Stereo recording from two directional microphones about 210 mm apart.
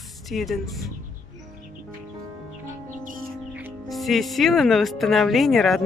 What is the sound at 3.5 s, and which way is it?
Speech, 5° right (ahead or behind).